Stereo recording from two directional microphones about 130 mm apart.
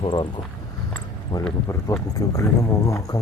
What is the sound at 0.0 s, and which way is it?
Speech, 40° left (ahead or behind).